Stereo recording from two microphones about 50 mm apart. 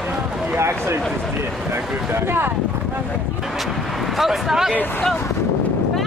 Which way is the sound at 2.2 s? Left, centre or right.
Right.